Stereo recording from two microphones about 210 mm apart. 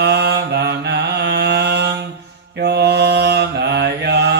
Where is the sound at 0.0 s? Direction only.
50° right (ahead or behind).